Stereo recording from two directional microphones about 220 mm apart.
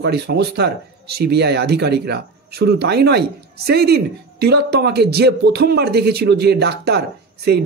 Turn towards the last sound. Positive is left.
turn(degrees=-45)  # may be behind; listen again after turning